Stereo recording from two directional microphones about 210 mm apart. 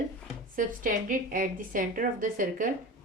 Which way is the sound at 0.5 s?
40° right (ahead or behind).